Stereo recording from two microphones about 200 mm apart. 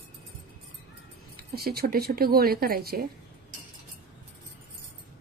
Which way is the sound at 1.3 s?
50° right (ahead or behind).